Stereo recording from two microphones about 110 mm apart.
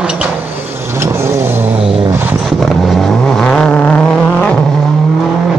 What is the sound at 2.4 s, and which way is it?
Vehicle, centre (ahead or behind).